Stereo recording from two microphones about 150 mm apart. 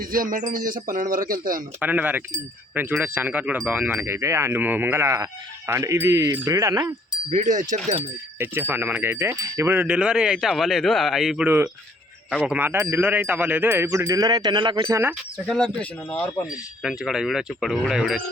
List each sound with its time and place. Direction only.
0.0 s speech: 70° right (ahead or behind)
1.8 s speech: 10° right (ahead or behind)
7.3 s wind chime: 60° right (ahead or behind)
8.4 s speech: 15° right (ahead or behind)
11.4 s speech: 15° right (ahead or behind); by 14.9 s 30° right (ahead or behind)
15.4 s speech: 5° left (ahead or behind)
16.5 s speech: 5° right (ahead or behind)